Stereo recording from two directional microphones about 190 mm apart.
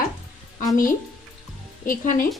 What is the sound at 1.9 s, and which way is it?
Speech, 45° left (ahead or behind).